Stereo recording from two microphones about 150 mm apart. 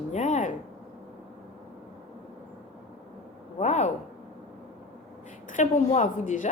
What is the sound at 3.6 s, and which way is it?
Speech, 50° left (ahead or behind).